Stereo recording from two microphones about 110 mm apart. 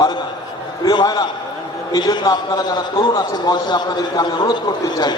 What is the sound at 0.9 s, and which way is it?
A man's voice, 35° left (ahead or behind).